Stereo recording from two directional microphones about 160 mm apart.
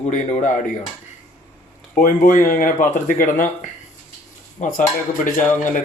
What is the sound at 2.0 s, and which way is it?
Speech, 60° left (ahead or behind).